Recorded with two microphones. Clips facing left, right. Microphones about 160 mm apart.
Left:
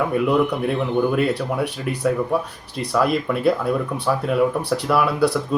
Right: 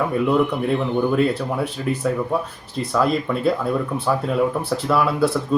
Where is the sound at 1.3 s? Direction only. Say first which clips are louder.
Left 1 dB; 70° left (ahead or behind).